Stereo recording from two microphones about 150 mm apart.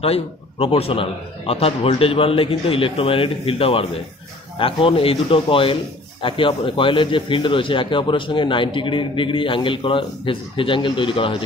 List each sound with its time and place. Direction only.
0.0 s a man's voice: 40° left (ahead or behind)